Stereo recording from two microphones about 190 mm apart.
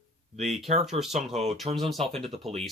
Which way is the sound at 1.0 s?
35° right (ahead or behind).